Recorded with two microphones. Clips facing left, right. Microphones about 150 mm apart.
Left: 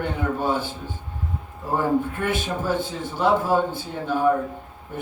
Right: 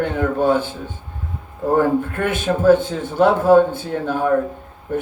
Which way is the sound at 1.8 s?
55° right (ahead or behind).